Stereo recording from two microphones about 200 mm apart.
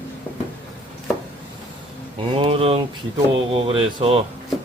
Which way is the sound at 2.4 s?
30° right (ahead or behind).